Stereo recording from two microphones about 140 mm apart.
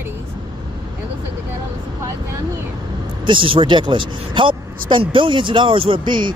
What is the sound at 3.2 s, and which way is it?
Speech, 35° right (ahead or behind).